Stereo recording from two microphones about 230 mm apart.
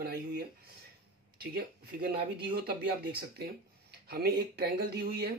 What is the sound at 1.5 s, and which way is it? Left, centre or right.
Speech, right.